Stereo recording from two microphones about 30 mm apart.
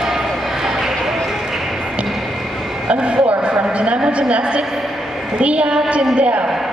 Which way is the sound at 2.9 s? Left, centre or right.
Right.